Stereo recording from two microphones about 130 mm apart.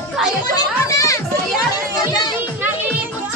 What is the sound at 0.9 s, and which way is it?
Children playing, 25° left (ahead or behind).